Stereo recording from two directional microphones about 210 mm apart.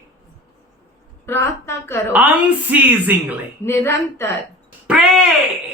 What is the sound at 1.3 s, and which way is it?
Speech, 10° left (ahead or behind).